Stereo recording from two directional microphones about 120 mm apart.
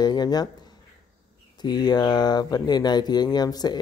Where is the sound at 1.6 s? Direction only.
35° left (ahead or behind).